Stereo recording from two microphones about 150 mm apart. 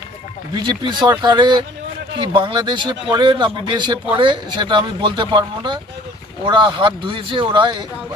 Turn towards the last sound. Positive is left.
turn(degrees=-30)  # may be behind; listen again after turning